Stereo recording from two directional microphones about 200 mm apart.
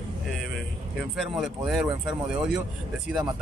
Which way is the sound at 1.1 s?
Centre (ahead or behind).